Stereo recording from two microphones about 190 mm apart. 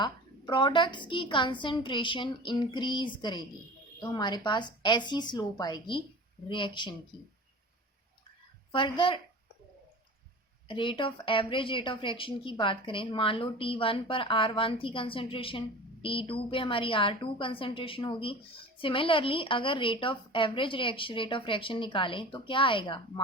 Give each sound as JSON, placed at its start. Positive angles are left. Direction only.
{"t": 0.0, "sound": "a woman's voice", "side_deg": 25}
{"t": 8.7, "sound": "a woman's voice", "side_deg": 25}
{"t": 10.7, "sound": "a woman's voice", "side_deg": 25}